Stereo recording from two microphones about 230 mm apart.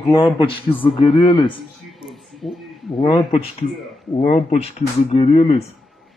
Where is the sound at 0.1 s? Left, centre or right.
Centre.